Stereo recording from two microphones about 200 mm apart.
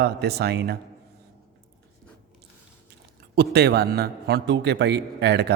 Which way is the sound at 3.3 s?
55° right (ahead or behind).